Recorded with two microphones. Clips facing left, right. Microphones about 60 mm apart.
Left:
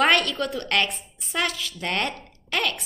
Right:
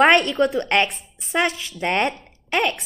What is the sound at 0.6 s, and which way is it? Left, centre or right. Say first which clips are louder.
A woman's voice: right 5 dB; right.